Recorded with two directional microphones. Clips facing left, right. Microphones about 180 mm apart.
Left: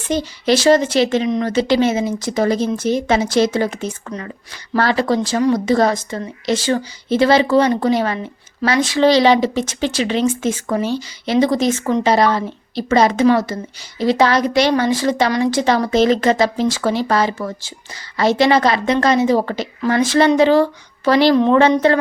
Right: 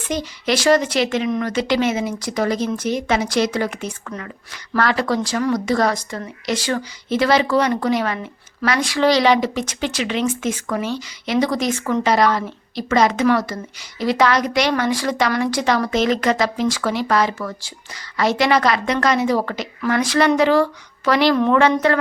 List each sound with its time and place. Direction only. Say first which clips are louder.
0.0 s speech: left 4 dB; 30° left (ahead or behind)